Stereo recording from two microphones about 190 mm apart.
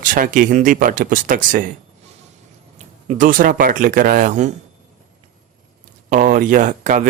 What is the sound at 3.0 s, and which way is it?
Speech, 45° right (ahead or behind).